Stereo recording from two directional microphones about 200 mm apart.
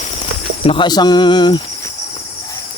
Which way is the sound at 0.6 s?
25° left (ahead or behind).